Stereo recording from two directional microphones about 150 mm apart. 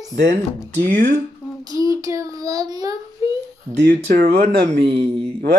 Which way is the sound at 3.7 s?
90° right.